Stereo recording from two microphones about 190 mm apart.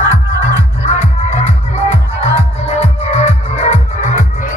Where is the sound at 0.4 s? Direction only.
35° left (ahead or behind).